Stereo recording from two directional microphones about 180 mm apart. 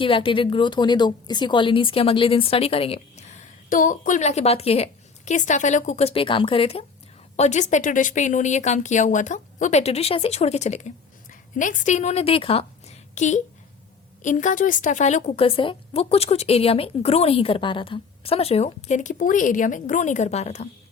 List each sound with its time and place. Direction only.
0.0 s speech: 30° left (ahead or behind)
13.1 s speech: 40° left (ahead or behind)